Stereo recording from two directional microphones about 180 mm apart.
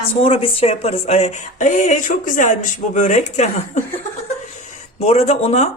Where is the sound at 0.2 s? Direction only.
35° left (ahead or behind).